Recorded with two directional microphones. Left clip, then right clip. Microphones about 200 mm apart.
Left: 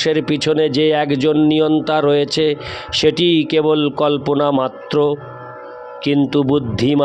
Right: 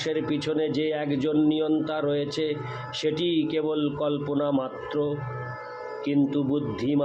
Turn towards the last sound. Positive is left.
turn(degrees=55)  # may be behind; listen again after turning